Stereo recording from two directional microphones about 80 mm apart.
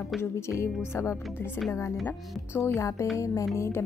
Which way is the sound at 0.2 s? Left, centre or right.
Left.